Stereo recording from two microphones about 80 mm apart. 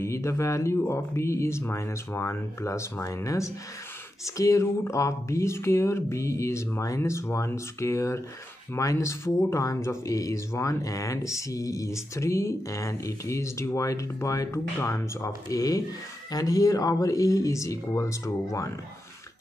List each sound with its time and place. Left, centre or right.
0.0 s speech: left